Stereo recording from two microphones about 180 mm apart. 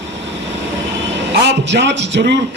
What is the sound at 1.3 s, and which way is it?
A man's voice, 75° right (ahead or behind).